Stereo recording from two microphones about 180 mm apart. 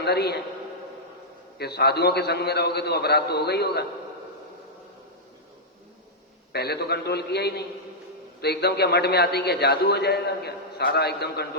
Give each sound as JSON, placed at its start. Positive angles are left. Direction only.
{"t": 0.0, "sound": "a man's voice", "side_deg": 65}
{"t": 1.5, "sound": "a man's voice", "side_deg": 65}
{"t": 6.5, "sound": "a man's voice", "side_deg": 60}